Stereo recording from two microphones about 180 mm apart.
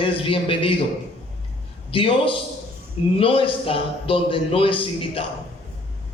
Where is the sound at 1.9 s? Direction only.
30° left (ahead or behind).